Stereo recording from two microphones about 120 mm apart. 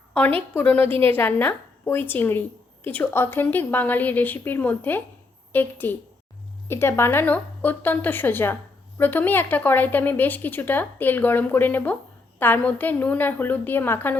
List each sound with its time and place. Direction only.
0.5 s speech: 15° left (ahead or behind)